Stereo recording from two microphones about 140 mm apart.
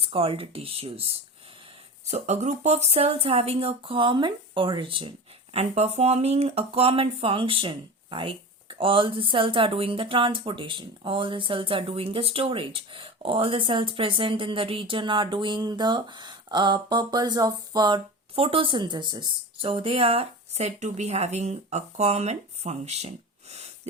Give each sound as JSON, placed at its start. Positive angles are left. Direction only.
{"t": 0.0, "sound": "speech", "side_deg": -45}
{"t": 2.0, "sound": "speech", "side_deg": -55}